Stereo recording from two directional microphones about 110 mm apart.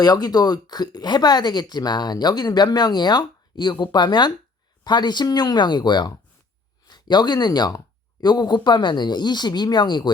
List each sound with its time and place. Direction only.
0.0 s speech: 35° left (ahead or behind)